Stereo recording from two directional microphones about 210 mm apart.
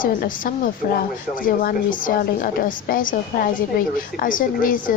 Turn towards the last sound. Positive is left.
turn(degrees=40)  # may be behind; listen again after turning